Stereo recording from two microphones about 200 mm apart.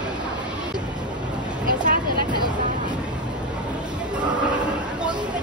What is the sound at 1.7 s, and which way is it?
Vehicle, 45° right (ahead or behind).